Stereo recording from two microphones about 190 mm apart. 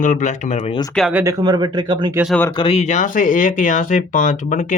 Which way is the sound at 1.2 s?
20° right (ahead or behind).